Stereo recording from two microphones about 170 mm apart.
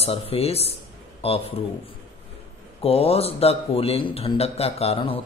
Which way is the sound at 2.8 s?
35° left (ahead or behind).